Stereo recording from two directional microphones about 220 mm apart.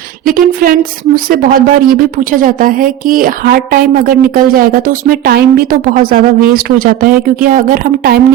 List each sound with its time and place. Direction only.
0.3 s a woman's voice: 40° right (ahead or behind)